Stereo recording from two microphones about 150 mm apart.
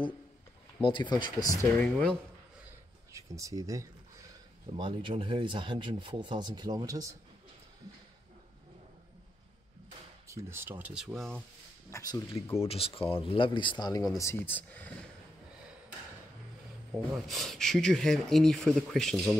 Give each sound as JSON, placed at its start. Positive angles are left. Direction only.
{"t": 0.8, "sound": "speech", "side_deg": 30}
{"t": 1.8, "sound": "speech", "side_deg": 5}
{"t": 3.1, "sound": "speech", "side_deg": -20}
{"t": 4.7, "sound": "speech", "side_deg": -35}
{"t": 10.2, "sound": "speech", "side_deg": -20}
{"t": 11.9, "sound": "speech", "side_deg": 20}
{"t": 12.5, "sound": "speech", "side_deg": 40}
{"t": 17.3, "sound": "speech", "side_deg": 0}